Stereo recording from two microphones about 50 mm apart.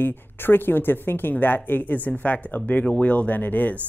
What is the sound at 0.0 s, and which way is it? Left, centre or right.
Speech, left.